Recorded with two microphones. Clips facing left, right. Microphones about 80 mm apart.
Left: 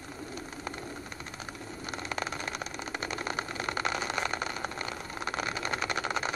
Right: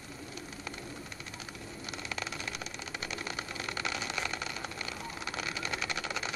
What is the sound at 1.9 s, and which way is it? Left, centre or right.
Vehicle, left.